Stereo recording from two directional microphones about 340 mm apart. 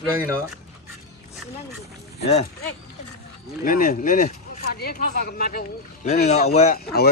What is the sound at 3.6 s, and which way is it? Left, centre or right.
Speech, left.